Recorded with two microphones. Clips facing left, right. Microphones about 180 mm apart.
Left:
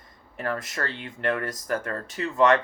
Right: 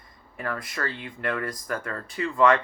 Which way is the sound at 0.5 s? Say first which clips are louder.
Left 2 dB; 45° left (ahead or behind).